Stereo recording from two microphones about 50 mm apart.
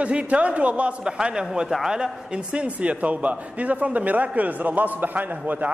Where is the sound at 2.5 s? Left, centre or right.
Right.